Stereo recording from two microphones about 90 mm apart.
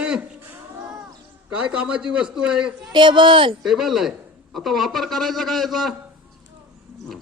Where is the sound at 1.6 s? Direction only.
10° right (ahead or behind).